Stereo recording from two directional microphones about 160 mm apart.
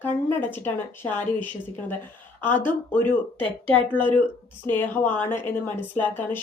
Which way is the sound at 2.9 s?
10° left (ahead or behind).